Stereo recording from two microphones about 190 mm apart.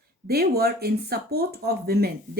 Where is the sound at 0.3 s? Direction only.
55° right (ahead or behind).